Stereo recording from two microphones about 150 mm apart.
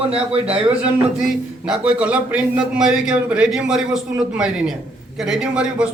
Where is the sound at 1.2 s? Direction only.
5° right (ahead or behind).